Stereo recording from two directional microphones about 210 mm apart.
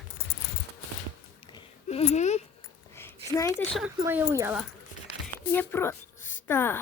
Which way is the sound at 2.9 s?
10° left (ahead or behind).